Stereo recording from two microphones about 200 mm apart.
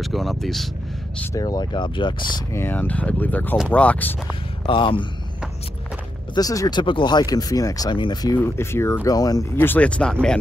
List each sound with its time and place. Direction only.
0.0 s speech: centre (ahead or behind)
1.2 s speech: 15° left (ahead or behind)
2.5 s speech: 10° left (ahead or behind)
4.6 s speech: 25° left (ahead or behind)
6.3 s speech: 20° left (ahead or behind)